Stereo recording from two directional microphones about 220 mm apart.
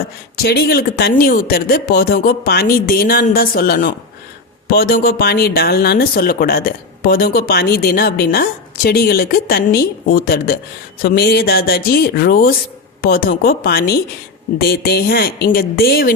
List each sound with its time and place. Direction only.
0.4 s speech: 45° left (ahead or behind)